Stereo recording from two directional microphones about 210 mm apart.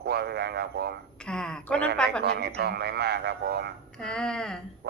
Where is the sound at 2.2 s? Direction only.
50° right (ahead or behind).